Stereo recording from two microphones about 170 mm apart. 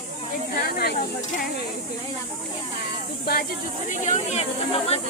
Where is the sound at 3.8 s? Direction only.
40° left (ahead or behind).